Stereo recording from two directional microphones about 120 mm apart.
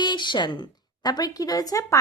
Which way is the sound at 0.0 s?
40° left (ahead or behind).